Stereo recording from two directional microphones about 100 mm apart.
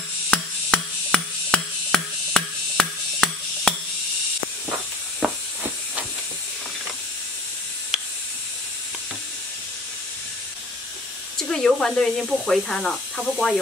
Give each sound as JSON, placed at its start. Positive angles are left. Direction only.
{"t": 0.3, "sound": "a sound", "side_deg": 10}
{"t": 5.2, "sound": "steam", "side_deg": -10}
{"t": 11.3, "sound": "speech", "side_deg": 5}